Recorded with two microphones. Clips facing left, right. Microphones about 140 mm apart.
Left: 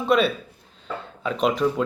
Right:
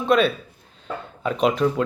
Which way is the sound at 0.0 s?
5° left (ahead or behind).